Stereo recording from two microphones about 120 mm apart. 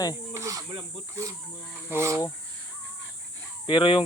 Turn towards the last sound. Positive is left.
turn(degrees=45)  # may be behind; listen again after turning